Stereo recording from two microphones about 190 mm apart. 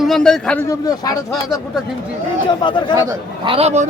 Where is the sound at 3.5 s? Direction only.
35° right (ahead or behind).